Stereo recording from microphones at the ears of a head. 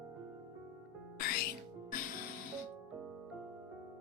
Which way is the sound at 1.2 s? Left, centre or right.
Left.